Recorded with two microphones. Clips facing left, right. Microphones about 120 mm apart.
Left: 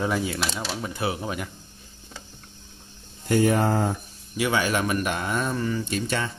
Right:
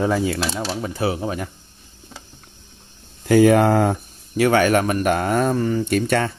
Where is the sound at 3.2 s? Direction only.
90° right.